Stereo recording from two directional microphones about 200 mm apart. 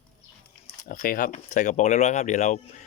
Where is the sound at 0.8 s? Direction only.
40° left (ahead or behind).